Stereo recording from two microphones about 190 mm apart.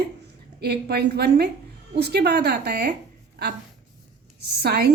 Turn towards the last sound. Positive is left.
turn(degrees=-55)  # may be behind; listen again after turning